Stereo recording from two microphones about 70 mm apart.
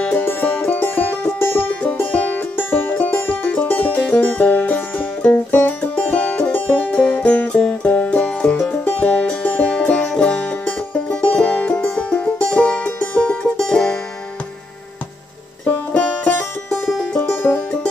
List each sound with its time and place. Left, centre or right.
0.2 s music: left; by 13.9 s centre
15.9 s music: centre
16.8 s music: centre
17.3 s music: left